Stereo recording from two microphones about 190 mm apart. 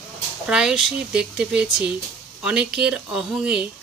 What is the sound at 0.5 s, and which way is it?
Speech, 5° right (ahead or behind).